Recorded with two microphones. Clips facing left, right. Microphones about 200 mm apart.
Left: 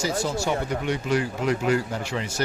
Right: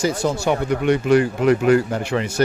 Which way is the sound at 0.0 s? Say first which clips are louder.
Right 5 dB; 60° right (ahead or behind).